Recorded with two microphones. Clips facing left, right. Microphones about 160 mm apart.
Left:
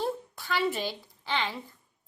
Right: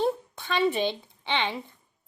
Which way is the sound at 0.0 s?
20° right (ahead or behind).